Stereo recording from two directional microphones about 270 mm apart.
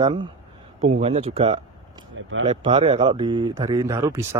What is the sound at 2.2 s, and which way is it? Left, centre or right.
Speech, right.